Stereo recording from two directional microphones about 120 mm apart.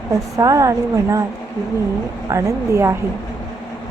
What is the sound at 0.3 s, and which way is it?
Speech, 30° right (ahead or behind).